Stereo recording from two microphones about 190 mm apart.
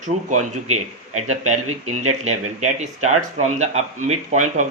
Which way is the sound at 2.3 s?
35° right (ahead or behind).